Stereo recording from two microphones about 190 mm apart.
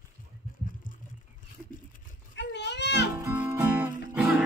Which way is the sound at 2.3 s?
65° left (ahead or behind).